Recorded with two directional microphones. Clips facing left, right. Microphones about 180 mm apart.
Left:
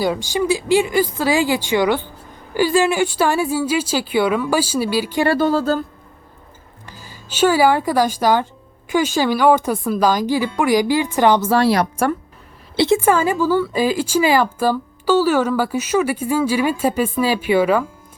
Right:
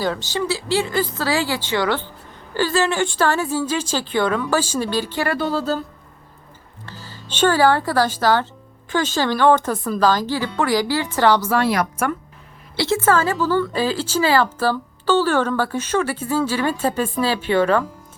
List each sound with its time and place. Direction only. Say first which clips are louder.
0.0 s speech: left 3 dB; 15° left (ahead or behind)
5.4 s speech: left 5 dB; 45° left (ahead or behind)
6.8 s speech: right 2 dB; 15° left (ahead or behind); by 12.1 s 30° left (ahead or behind)
12.7 s speech: left 3 dB; 20° left (ahead or behind)